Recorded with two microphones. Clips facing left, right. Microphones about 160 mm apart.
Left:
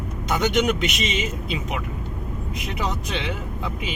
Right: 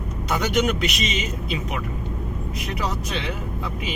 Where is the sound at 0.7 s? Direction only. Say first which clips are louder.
Left 1 dB; 25° left (ahead or behind).